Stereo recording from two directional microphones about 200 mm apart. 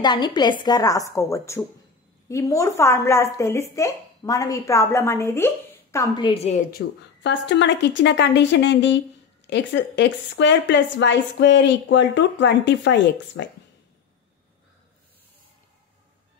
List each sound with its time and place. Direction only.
0.0 s a woman's voice: 20° left (ahead or behind)
6.2 s a woman's voice: 30° left (ahead or behind)
7.2 s a woman's voice: 60° left (ahead or behind)